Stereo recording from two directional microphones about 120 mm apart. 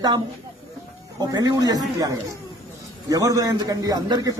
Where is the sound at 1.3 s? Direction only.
30° right (ahead or behind).